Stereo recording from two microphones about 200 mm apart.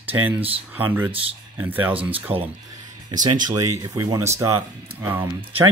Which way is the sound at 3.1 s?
20° right (ahead or behind).